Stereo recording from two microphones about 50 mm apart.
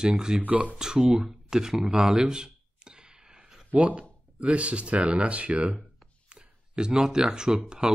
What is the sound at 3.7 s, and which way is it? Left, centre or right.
Speech, right.